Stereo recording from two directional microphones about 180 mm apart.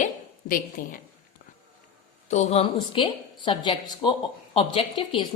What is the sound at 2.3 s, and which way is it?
A woman's voice, 40° left (ahead or behind).